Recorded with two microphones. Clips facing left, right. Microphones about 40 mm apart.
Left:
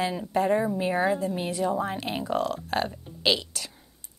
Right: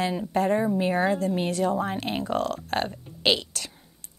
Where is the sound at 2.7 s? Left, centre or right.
Right.